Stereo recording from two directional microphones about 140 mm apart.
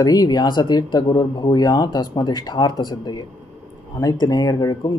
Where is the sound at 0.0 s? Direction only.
25° left (ahead or behind).